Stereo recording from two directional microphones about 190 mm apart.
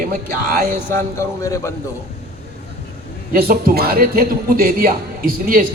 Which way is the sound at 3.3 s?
50° right (ahead or behind).